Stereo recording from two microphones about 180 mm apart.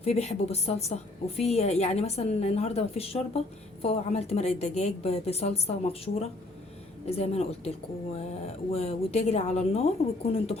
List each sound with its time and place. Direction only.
0.0 s a woman's voice: 35° left (ahead or behind)
8.7 s a woman's voice: 35° left (ahead or behind)